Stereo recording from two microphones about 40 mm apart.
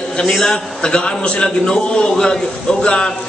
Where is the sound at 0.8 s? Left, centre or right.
Left.